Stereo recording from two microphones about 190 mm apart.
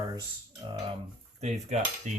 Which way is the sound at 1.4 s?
35° right (ahead or behind).